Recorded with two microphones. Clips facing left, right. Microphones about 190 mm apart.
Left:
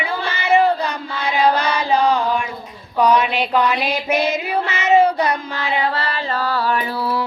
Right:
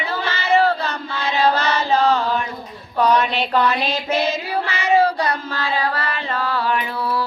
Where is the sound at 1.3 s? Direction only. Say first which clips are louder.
Left 1 dB; 15° left (ahead or behind).